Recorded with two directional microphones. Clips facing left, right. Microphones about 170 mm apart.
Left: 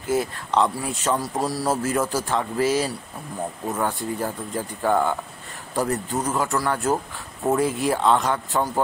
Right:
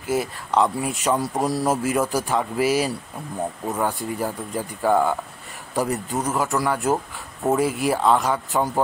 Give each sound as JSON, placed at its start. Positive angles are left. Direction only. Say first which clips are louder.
{"t": 0.1, "sound": "speech", "louder": "even", "side_deg": -5}
{"t": 1.0, "sound": "speech", "louder": "right 2 dB", "side_deg": -15}